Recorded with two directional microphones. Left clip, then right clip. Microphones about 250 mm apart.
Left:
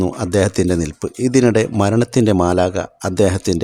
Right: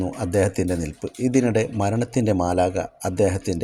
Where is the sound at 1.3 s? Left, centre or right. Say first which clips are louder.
Left 7 dB; left.